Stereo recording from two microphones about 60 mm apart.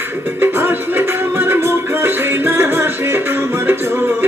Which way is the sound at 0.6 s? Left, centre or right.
Right.